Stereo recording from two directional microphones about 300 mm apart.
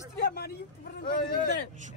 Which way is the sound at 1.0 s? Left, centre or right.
Left.